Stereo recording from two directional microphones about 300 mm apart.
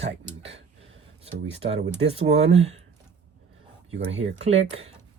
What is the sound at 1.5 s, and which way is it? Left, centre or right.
Speech, centre.